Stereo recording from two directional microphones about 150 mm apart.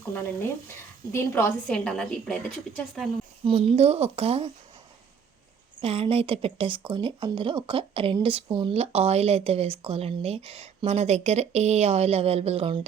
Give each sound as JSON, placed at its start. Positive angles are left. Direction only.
{"t": 0.1, "sound": "speech", "side_deg": 15}
{"t": 1.6, "sound": "a woman's voice", "side_deg": 5}
{"t": 3.4, "sound": "a woman's voice", "side_deg": -40}
{"t": 5.8, "sound": "speech", "side_deg": -40}